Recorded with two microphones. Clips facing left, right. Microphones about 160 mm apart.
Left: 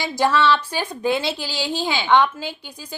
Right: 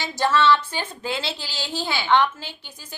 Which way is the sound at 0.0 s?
15° left (ahead or behind).